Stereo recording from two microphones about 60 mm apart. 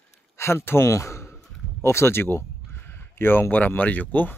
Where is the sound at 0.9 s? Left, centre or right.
Left.